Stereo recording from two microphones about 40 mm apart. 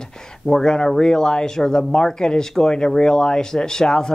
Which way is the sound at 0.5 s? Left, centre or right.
Centre.